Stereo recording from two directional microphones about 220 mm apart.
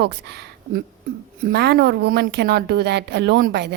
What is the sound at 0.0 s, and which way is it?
A woman's voice, 50° right (ahead or behind).